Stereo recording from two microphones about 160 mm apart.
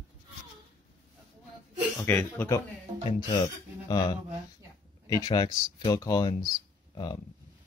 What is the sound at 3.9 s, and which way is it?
Speech, 25° left (ahead or behind).